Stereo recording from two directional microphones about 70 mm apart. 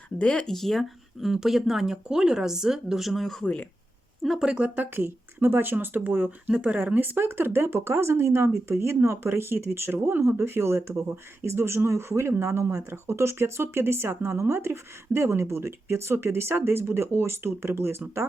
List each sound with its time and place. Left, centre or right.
0.2 s speech: centre
3.4 s speech: centre
4.2 s speech: centre
4.4 s speech: centre; by 18.0 s right